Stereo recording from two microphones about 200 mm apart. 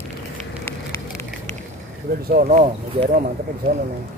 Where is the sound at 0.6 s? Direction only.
15° left (ahead or behind).